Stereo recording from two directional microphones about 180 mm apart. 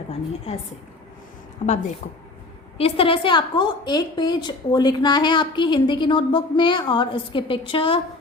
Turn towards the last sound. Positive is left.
turn(degrees=30)  # may be behind; listen again after turning